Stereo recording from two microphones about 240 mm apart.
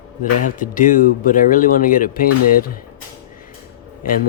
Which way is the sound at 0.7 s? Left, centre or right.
Left.